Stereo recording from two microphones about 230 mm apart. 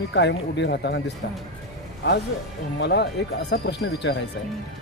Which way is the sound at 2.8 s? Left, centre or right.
Left.